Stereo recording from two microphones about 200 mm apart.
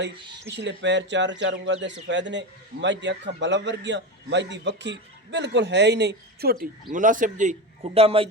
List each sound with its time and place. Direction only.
0.5 s a man's voice: 60° right (ahead or behind); by 7.5 s 40° right (ahead or behind)
7.9 s speech: 30° right (ahead or behind)